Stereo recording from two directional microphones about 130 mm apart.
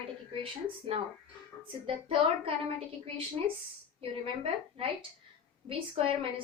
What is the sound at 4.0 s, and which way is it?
A woman's voice, 45° right (ahead or behind).